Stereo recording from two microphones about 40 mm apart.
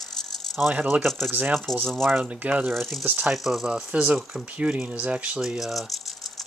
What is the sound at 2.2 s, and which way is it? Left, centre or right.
Speech, right.